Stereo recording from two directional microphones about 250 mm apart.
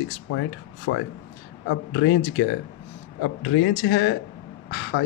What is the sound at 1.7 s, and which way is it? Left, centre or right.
Speech, left.